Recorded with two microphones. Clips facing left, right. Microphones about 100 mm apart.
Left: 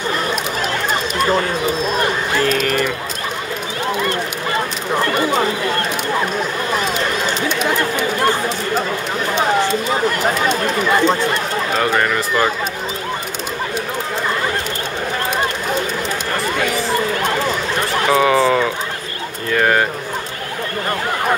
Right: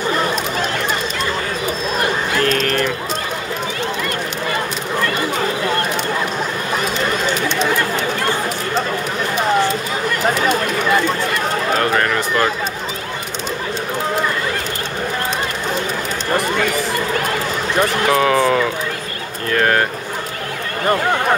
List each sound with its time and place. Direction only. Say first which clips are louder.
2.3 s speech: left 1 dB; 5° left (ahead or behind)
10.5 s chatter: even; 25° left (ahead or behind)
11.7 s bird: left 1 dB; centre (ahead or behind)
18.0 s a sound: left 3 dB; centre (ahead or behind)